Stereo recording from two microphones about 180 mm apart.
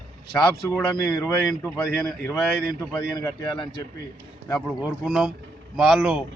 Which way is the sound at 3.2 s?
25° left (ahead or behind).